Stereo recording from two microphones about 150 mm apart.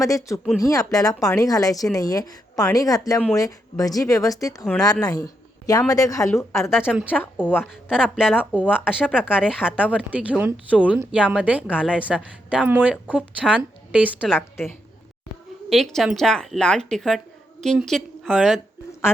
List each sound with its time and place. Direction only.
0.0 s speech: 20° left (ahead or behind)
6.8 s a woman's voice: 5° right (ahead or behind)
14.3 s a woman's voice: 15° left (ahead or behind)
15.7 s a woman's voice: centre (ahead or behind)